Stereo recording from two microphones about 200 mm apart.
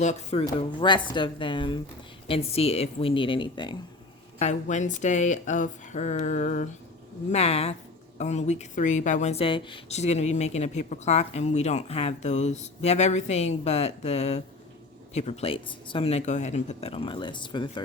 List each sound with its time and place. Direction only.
0.0 s speech: 35° left (ahead or behind)
0.4 s speech: 25° left (ahead or behind)
4.4 s speech: 35° left (ahead or behind)